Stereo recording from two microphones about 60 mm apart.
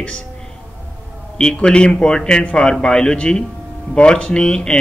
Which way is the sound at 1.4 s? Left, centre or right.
Centre.